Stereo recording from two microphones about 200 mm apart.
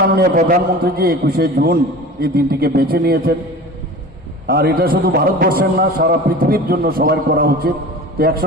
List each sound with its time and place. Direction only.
0.2 s a man's voice: 40° right (ahead or behind)
4.4 s a man's voice: 50° right (ahead or behind)